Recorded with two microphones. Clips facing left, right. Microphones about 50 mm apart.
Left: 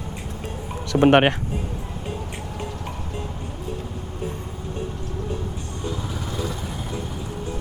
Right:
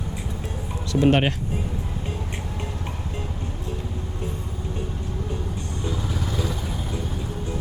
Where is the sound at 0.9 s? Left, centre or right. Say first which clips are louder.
Left 4 dB; left.